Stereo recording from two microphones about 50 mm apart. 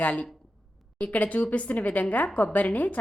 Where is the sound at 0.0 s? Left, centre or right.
Left.